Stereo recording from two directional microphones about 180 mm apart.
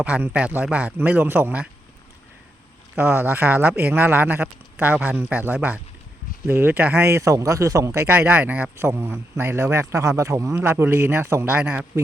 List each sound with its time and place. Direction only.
0.0 s speech: 10° right (ahead or behind)
2.9 s speech: 10° right (ahead or behind)